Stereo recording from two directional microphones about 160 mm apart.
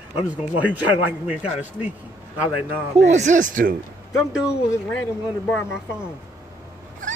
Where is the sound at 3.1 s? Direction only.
50° right (ahead or behind).